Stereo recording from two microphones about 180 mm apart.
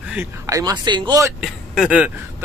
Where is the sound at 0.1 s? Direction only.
15° right (ahead or behind).